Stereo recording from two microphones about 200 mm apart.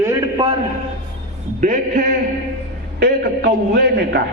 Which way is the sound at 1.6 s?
45° right (ahead or behind).